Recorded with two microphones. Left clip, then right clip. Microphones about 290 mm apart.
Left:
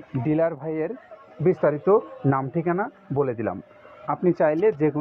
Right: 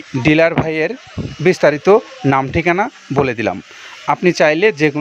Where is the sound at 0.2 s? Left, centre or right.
Right.